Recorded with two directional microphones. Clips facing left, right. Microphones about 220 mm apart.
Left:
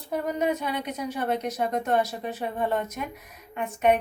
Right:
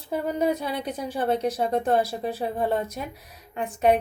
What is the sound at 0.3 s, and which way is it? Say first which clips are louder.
A woman's voice: right 2 dB; 35° right (ahead or behind).